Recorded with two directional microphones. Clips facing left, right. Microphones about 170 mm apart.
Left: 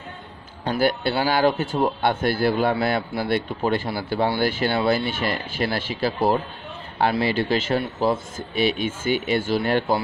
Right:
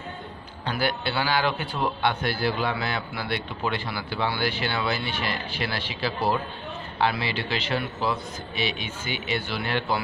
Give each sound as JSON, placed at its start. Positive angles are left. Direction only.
{"t": 0.7, "sound": "a man's voice", "side_deg": 45}